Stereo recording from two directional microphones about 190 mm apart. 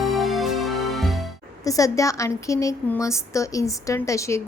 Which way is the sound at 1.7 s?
15° left (ahead or behind).